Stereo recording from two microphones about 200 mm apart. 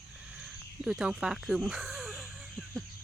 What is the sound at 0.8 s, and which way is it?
Speech, 5° right (ahead or behind).